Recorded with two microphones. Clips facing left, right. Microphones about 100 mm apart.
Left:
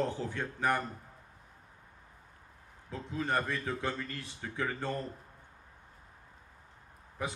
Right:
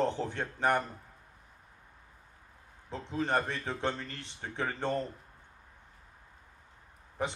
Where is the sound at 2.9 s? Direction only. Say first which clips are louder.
Right 2 dB; 65° right (ahead or behind).